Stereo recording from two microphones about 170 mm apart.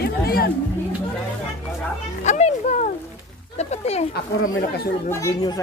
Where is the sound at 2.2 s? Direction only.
45° left (ahead or behind).